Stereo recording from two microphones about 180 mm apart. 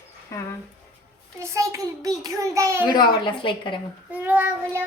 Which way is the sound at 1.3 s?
15° right (ahead or behind).